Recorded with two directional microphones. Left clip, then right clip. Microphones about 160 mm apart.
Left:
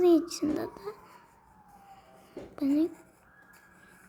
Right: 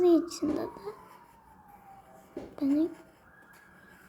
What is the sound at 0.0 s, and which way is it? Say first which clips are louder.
Speech: left 1 dB; 20° left (ahead or behind).